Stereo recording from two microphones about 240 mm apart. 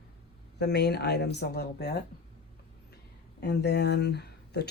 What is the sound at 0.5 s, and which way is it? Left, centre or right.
Speech, left.